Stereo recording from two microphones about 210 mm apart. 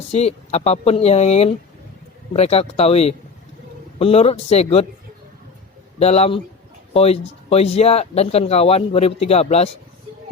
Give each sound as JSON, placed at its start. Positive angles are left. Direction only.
{"t": 0.1, "sound": "speech", "side_deg": 30}
{"t": 6.0, "sound": "speech", "side_deg": 30}